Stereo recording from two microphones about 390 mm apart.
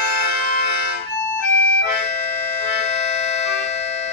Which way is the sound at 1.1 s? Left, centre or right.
Centre.